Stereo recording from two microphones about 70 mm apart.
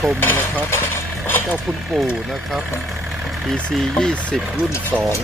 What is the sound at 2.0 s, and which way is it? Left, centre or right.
Speech, centre.